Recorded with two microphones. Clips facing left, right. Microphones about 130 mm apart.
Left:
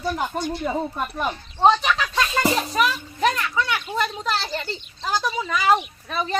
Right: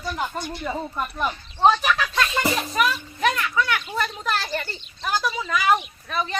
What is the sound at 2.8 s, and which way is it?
Children playing, 30° left (ahead or behind).